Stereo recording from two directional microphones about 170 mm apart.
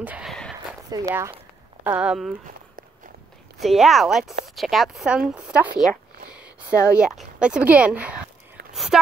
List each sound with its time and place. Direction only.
0.0 s speech: 10° right (ahead or behind)
0.8 s speech: 20° right (ahead or behind)
1.9 s speech: 5° right (ahead or behind)
3.5 s speech: centre (ahead or behind)